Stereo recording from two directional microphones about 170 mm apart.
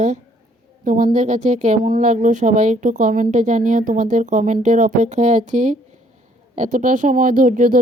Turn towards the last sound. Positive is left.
turn(degrees=-50)  # may be behind; listen again after turning